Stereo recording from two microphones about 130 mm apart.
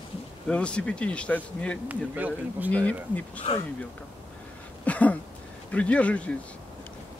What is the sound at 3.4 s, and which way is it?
Speech, 55° left (ahead or behind).